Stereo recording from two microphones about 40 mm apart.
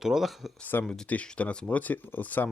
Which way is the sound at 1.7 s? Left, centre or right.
Left.